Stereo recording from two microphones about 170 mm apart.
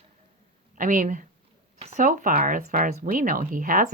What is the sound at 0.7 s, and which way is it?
Speech, 50° right (ahead or behind).